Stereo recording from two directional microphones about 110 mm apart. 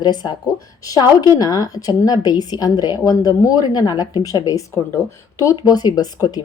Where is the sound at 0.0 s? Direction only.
40° left (ahead or behind).